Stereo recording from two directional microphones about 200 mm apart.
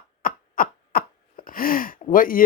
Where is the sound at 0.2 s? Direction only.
45° left (ahead or behind).